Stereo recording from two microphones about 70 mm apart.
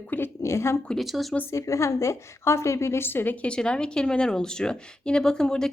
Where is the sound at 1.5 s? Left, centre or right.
Left.